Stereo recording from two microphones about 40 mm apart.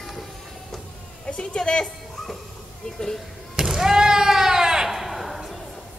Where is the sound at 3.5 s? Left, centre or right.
Centre.